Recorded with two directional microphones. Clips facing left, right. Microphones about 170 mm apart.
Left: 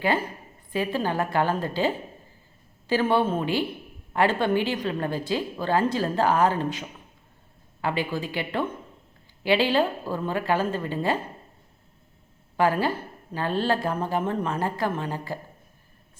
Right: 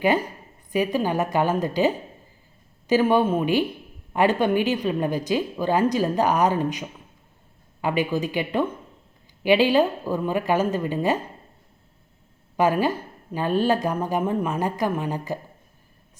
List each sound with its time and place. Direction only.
0.7 s a woman's voice: 15° right (ahead or behind)
12.5 s a woman's voice: 15° right (ahead or behind)